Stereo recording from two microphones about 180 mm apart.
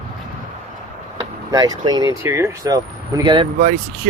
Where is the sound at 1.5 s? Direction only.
20° right (ahead or behind).